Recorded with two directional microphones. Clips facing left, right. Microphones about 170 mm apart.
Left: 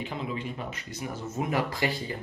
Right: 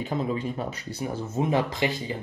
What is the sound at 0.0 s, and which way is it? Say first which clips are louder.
Speech: right 6 dB; 40° right (ahead or behind).